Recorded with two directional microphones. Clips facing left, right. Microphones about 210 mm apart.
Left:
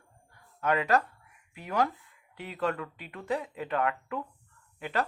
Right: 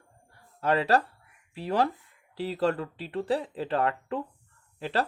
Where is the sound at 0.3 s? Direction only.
35° right (ahead or behind).